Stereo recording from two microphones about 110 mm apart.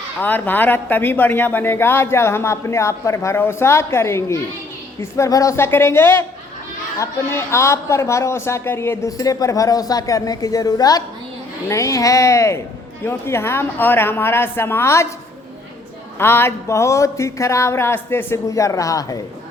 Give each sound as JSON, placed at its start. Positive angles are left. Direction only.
{"t": 0.2, "sound": "speech", "side_deg": 15}
{"t": 16.1, "sound": "speech", "side_deg": 20}